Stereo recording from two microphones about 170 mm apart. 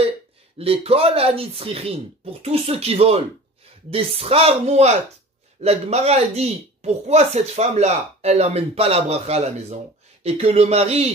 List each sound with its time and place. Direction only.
0.6 s speech: 35° right (ahead or behind)